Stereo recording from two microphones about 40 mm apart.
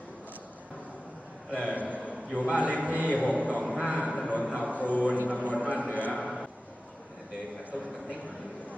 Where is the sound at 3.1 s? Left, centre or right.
Left.